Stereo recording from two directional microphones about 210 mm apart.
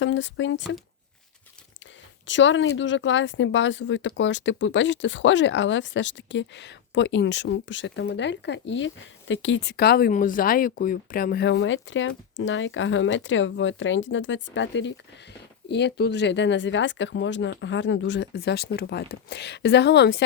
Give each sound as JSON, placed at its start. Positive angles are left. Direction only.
{"t": 0.0, "sound": "speech", "side_deg": 65}
{"t": 2.2, "sound": "speech", "side_deg": 60}